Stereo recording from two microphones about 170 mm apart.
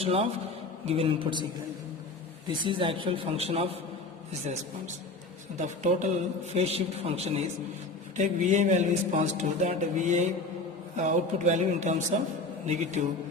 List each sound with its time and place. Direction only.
0.0 s a man's voice: 35° right (ahead or behind)
2.6 s a man's voice: 30° right (ahead or behind)
5.5 s a man's voice: 45° right (ahead or behind)